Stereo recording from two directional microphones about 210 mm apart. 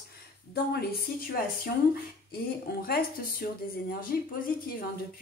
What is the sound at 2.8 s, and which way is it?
Speech, 45° left (ahead or behind).